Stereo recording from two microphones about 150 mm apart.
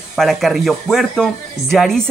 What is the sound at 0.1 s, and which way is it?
Speech, centre (ahead or behind).